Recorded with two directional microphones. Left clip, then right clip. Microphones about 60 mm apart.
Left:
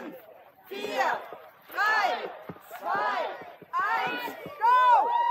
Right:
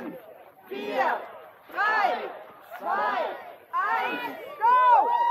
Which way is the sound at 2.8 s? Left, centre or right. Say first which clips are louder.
Right 2 dB; left.